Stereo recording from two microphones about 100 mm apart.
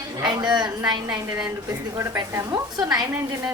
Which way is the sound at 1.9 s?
30° right (ahead or behind).